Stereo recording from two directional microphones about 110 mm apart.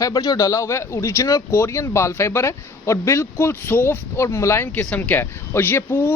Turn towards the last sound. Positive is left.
turn(degrees=20)  # may be behind; listen again after turning